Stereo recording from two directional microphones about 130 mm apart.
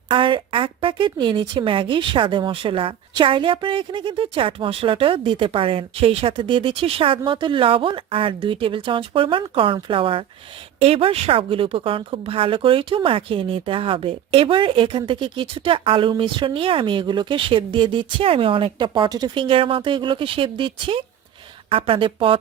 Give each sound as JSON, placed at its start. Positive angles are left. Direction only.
{"t": 0.1, "sound": "a woman's voice", "side_deg": -40}